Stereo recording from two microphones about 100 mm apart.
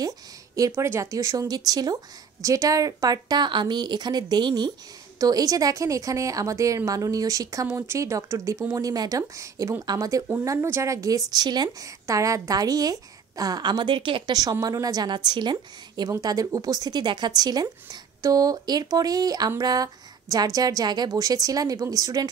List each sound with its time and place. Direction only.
0.6 s a woman's voice: 30° right (ahead or behind)
5.2 s a woman's voice: 35° right (ahead or behind)